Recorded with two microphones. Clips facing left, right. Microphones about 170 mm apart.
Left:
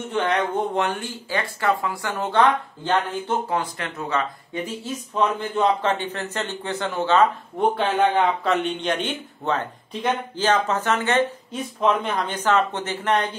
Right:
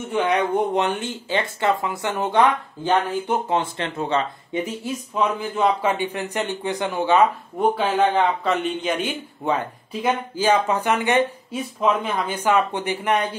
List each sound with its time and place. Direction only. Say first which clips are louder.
0.1 s speech: right 2 dB; 10° right (ahead or behind)
3.5 s speech: right 3 dB; 25° right (ahead or behind)
4.6 s speech: right 2 dB; 10° right (ahead or behind)